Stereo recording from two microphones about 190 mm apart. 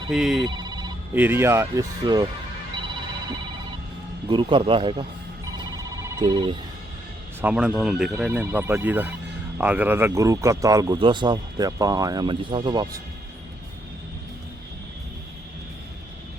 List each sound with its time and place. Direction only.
0.1 s speech: 5° right (ahead or behind)
0.4 s a sound: 20° right (ahead or behind)
1.1 s speech: 10° right (ahead or behind)
4.3 s a man's voice: 25° right (ahead or behind)
6.1 s speech: 20° right (ahead or behind)
7.4 s speech: 5° right (ahead or behind)
8.3 s a man's voice: 10° right (ahead or behind)